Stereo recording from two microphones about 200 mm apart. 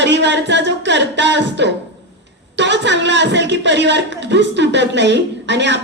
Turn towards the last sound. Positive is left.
turn(degrees=-60)  # may be behind; listen again after turning